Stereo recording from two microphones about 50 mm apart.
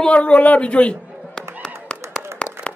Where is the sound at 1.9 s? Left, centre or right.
Centre.